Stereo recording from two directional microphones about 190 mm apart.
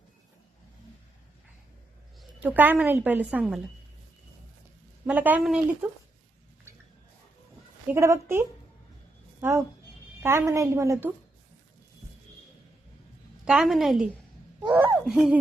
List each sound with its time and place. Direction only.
2.4 s a woman's voice: 10° right (ahead or behind)
5.0 s a woman's voice: 10° right (ahead or behind)
7.9 s a woman's voice: 15° right (ahead or behind)
13.4 s a woman's voice: centre (ahead or behind)